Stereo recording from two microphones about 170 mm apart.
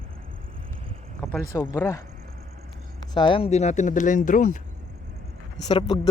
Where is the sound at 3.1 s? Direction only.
30° left (ahead or behind); by 4.6 s 50° left (ahead or behind).